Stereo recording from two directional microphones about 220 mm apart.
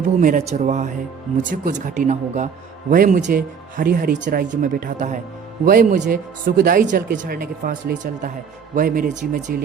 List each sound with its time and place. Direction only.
0.2 s speech: 35° right (ahead or behind)